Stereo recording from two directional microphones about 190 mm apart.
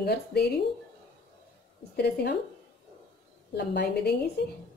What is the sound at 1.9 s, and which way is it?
Speech, 60° left (ahead or behind).